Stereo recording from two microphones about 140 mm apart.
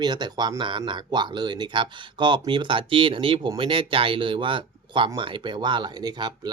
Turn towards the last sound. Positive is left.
turn(degrees=-30)  # may be behind; listen again after turning